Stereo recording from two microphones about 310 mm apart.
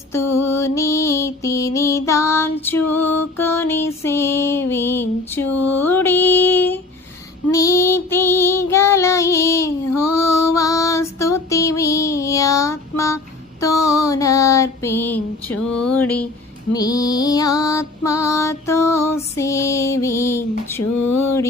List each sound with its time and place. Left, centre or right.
0.2 s music: left
0.5 s music: centre
7.5 s child singing: centre
10.4 s female singing: centre
11.4 s music: centre
11.8 s female singing: centre
13.6 s a sound: centre
16.7 s music: centre
20.8 s a sound: left